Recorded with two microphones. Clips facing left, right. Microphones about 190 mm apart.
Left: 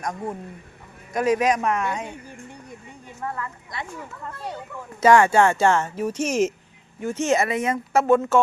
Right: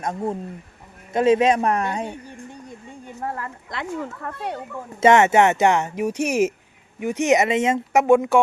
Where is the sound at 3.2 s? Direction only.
40° right (ahead or behind).